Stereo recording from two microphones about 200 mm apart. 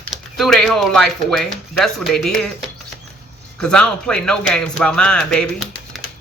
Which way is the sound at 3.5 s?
5° left (ahead or behind).